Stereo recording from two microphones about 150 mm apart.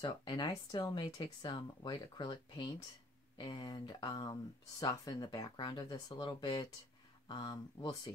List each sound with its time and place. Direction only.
0.0 s speech: 30° left (ahead or behind)